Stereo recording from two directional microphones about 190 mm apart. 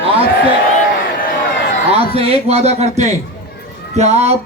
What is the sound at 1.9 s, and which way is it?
A man's voice, 30° right (ahead or behind).